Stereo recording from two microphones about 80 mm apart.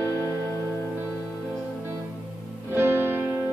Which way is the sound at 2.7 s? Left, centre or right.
Right.